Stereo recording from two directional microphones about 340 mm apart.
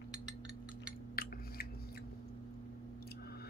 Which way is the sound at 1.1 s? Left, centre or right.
Left.